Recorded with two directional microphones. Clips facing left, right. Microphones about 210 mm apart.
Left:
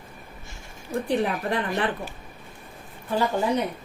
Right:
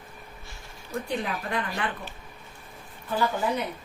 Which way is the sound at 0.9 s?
35° left (ahead or behind).